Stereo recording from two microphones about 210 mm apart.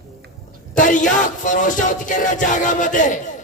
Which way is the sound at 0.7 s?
40° left (ahead or behind).